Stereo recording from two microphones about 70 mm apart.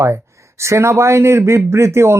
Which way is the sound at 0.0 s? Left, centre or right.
Right.